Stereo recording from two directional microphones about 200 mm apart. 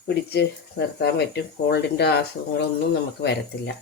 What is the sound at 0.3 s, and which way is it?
Speech, 55° left (ahead or behind).